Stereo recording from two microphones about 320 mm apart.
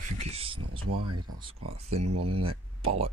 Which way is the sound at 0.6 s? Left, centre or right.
Right.